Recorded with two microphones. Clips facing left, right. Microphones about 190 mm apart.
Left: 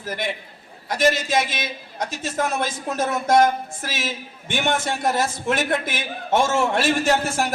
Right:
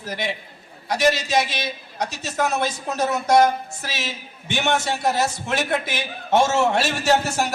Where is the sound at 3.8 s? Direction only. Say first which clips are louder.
Left 2 dB; 50° left (ahead or behind).